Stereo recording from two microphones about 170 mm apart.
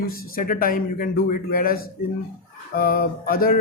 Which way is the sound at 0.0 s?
60° left (ahead or behind).